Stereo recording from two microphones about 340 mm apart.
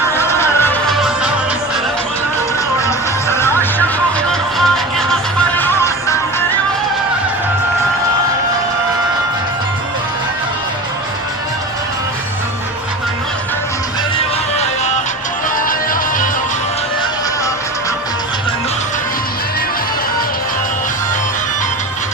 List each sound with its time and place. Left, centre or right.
0.2 s music: centre
2.8 s music: centre
15.6 s music: left